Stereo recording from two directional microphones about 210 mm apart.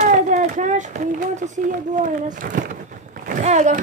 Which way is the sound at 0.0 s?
35° right (ahead or behind).